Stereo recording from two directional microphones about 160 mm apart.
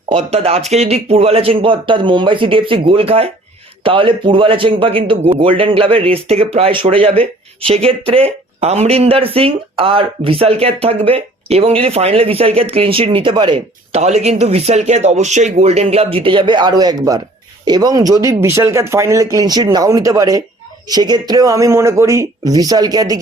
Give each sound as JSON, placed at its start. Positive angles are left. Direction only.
{"t": 0.1, "sound": "speech", "side_deg": -40}
{"t": 14.0, "sound": "speech", "side_deg": -40}